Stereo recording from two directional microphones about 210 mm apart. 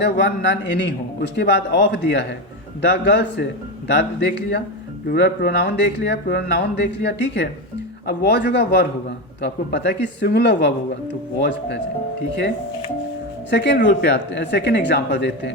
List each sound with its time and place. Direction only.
0.0 s a woman's voice: 55° left (ahead or behind)
13.5 s a woman's voice: 55° left (ahead or behind)